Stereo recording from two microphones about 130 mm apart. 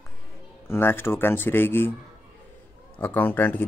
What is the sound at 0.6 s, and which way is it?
Speech, 15° left (ahead or behind).